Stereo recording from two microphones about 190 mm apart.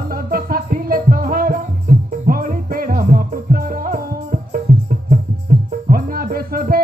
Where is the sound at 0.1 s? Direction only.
50° right (ahead or behind).